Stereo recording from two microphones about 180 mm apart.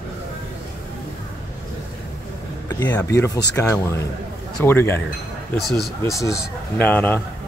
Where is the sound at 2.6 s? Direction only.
20° left (ahead or behind).